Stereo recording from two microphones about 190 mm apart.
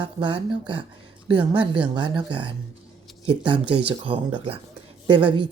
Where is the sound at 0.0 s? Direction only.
25° right (ahead or behind).